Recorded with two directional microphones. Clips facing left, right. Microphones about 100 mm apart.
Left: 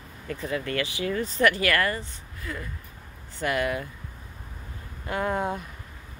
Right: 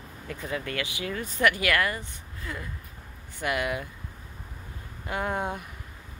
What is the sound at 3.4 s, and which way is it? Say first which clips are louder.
Speech: left 2 dB; 15° right (ahead or behind).